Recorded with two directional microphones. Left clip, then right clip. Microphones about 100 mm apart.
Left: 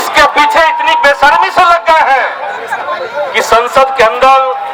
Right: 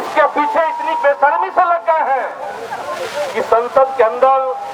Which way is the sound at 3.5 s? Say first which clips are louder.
Left 5 dB; 20° left (ahead or behind).